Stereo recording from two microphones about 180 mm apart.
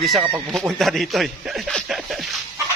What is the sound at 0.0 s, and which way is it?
A man's voice, centre (ahead or behind).